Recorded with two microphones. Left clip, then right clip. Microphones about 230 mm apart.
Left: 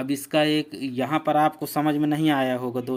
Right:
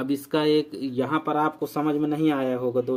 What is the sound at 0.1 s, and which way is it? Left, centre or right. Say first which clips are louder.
Speech: even; left.